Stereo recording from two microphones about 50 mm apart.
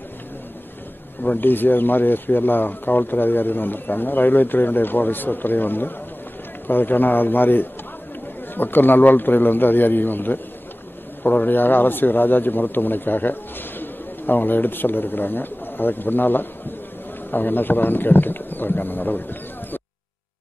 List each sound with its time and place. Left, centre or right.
1.2 s speech: left